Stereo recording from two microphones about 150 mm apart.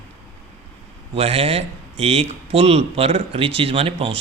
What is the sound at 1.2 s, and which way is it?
Speech, 40° right (ahead or behind).